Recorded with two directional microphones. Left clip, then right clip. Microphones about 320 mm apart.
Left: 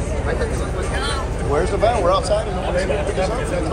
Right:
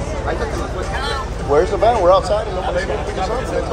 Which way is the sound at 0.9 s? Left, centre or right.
Right.